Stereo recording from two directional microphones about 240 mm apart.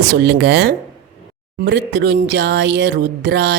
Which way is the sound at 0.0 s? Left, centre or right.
Right.